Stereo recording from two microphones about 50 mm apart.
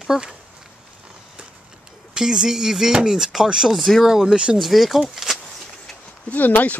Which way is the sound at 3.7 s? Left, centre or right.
Centre.